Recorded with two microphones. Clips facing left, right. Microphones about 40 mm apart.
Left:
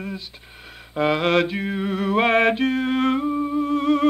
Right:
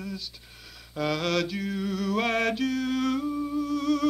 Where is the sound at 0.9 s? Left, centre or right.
Left.